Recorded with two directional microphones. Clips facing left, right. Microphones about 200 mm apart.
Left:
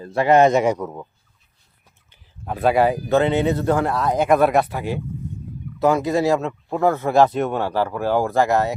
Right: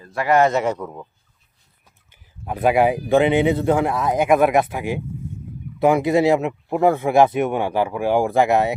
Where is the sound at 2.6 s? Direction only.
15° right (ahead or behind).